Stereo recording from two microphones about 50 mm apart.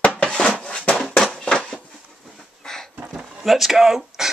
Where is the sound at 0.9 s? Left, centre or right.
Centre.